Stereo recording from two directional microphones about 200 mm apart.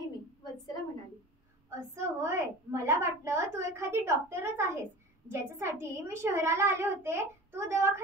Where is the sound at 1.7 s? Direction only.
15° right (ahead or behind).